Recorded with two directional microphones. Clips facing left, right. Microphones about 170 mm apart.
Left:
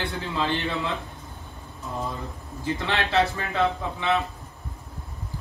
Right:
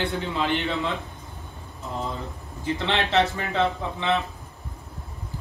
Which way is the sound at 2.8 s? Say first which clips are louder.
Right 1 dB; 20° right (ahead or behind).